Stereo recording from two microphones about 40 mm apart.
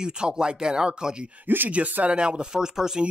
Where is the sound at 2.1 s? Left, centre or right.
Right.